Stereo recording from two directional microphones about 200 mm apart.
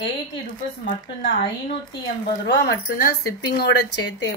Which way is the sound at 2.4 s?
55° left (ahead or behind).